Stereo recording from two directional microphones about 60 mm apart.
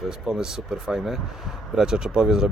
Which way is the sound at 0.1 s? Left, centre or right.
Centre.